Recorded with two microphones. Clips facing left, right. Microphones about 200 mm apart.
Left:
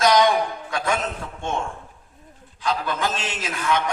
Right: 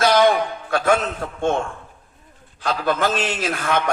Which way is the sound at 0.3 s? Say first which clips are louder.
Right 3 dB; 65° right (ahead or behind).